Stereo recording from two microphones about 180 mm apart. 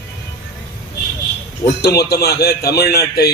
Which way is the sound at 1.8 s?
60° left (ahead or behind).